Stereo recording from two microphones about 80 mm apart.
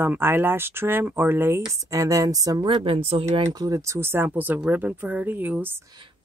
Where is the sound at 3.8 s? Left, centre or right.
Right.